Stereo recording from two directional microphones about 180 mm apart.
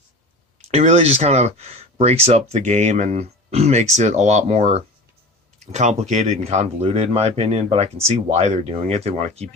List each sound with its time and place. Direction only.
0.7 s speech: 35° right (ahead or behind)